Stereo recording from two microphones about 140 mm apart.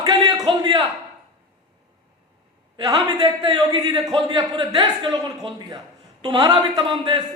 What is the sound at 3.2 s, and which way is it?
A man's voice, 30° right (ahead or behind).